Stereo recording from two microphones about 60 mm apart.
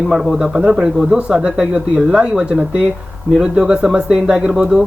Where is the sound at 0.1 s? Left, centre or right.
Centre.